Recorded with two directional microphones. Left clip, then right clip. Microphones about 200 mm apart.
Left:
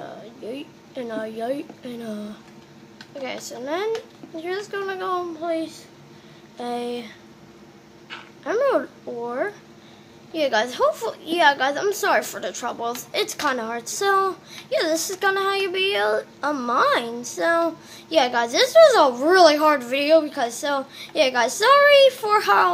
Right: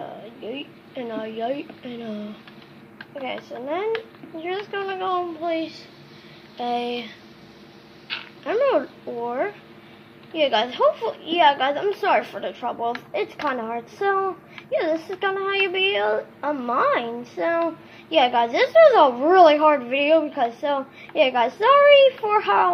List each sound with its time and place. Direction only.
0.0 s a sound: 15° left (ahead or behind)
3.6 s speech: 15° left (ahead or behind)
5.5 s a child's voice: 5° left (ahead or behind)
8.5 s speech: 10° left (ahead or behind)